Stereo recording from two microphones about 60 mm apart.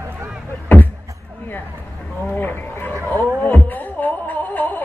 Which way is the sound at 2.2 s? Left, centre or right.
Left.